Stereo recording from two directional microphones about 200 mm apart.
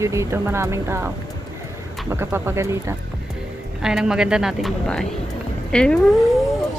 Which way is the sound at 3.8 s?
5° right (ahead or behind).